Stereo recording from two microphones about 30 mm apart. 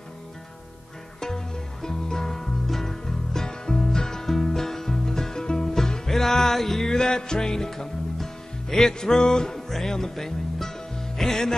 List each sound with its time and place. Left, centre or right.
1.2 s music: centre
3.4 s music: left; by 6.9 s centre
6.9 s music: left